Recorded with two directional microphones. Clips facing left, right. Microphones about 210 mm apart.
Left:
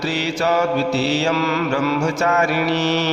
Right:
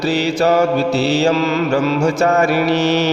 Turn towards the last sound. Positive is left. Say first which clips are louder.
# right 4 dB
turn(degrees=-35)  # may be behind; listen again after turning